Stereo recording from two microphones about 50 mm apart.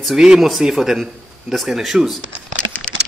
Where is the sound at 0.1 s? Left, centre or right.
Centre.